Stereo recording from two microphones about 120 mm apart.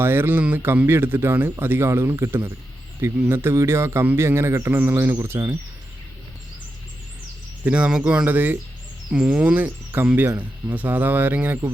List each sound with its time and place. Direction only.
0.0 s speech: 20° right (ahead or behind)
7.6 s speech: 10° right (ahead or behind)